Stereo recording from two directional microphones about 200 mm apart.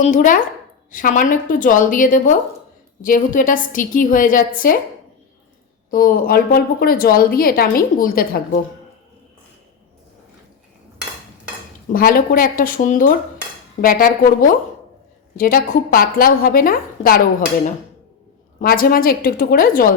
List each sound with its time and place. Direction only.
0.0 s a woman's voice: 40° left (ahead or behind)
5.9 s a woman's voice: 45° left (ahead or behind)
11.9 s a woman's voice: 45° left (ahead or behind)
18.6 s a woman's voice: 45° left (ahead or behind)